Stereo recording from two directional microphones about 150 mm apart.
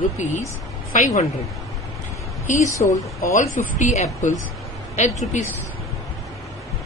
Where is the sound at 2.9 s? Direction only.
55° left (ahead or behind).